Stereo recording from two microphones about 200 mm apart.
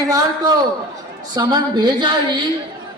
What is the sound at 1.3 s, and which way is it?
A woman's voice, 20° right (ahead or behind).